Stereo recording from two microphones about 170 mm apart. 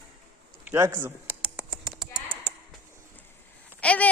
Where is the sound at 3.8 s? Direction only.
10° left (ahead or behind).